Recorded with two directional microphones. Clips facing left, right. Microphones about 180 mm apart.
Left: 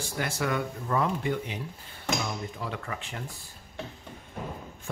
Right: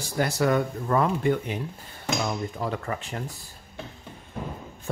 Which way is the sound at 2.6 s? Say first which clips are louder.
Right 6 dB; 40° right (ahead or behind).